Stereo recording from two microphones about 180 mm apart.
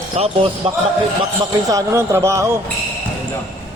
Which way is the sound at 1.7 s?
15° right (ahead or behind).